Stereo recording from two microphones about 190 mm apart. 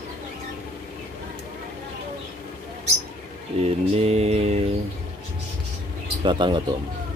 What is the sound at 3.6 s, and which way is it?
Mantra, 35° right (ahead or behind).